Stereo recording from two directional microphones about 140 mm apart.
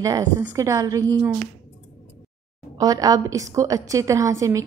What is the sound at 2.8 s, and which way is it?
A woman's voice, 25° right (ahead or behind).